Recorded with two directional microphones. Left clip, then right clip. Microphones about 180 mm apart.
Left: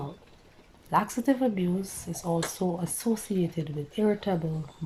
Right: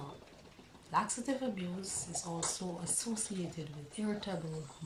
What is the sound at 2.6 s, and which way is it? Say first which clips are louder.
Speech: left 11 dB; 50° left (ahead or behind).